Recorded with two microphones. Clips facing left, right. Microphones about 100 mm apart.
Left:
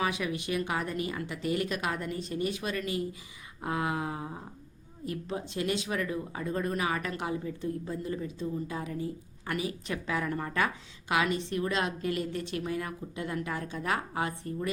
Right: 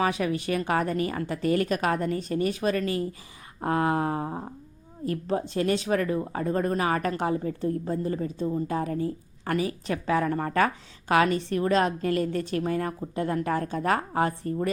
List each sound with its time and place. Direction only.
0.0 s a woman's voice: 40° right (ahead or behind)